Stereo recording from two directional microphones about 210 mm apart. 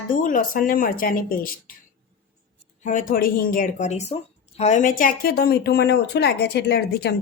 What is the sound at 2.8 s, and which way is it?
Speech, 40° left (ahead or behind).